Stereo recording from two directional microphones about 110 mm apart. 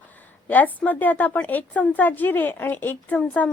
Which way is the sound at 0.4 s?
15° left (ahead or behind).